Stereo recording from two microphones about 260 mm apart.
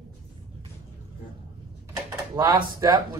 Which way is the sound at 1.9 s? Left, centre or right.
Centre.